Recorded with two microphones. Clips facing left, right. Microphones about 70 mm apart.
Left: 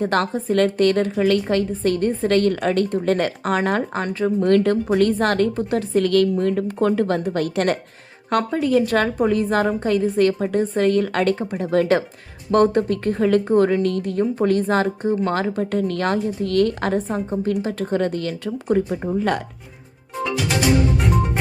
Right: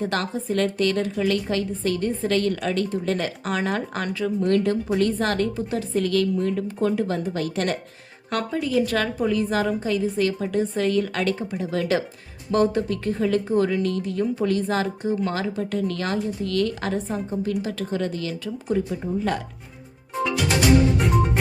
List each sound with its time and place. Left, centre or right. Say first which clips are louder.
0.0 s speech: left 5 dB; left